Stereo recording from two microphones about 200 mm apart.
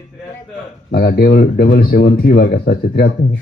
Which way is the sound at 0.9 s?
50° left (ahead or behind).